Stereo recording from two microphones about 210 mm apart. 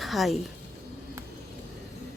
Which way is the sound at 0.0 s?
Centre (ahead or behind).